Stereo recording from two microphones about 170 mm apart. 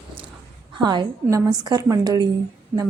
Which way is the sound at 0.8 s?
25° right (ahead or behind).